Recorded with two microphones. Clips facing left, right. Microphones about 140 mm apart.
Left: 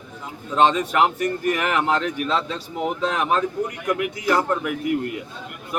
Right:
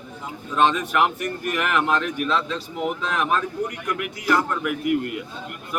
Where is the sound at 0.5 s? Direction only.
30° left (ahead or behind).